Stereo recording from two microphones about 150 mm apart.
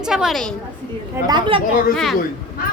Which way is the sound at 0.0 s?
5° right (ahead or behind).